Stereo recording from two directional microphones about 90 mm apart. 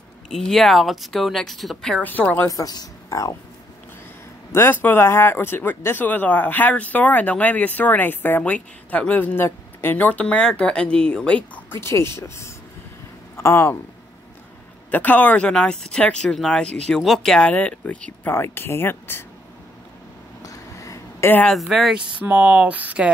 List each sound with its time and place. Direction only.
0.3 s speech: 5° left (ahead or behind)
2.0 s a woman's voice: 15° left (ahead or behind)
2.4 s speech: 40° left (ahead or behind)
4.5 s speech: 25° left (ahead or behind)
11.8 s speech: 30° left (ahead or behind)
14.9 s speech: 20° left (ahead or behind)
20.4 s a sound: 35° left (ahead or behind)
21.5 s speech: centre (ahead or behind)
22.2 s speech: 15° right (ahead or behind)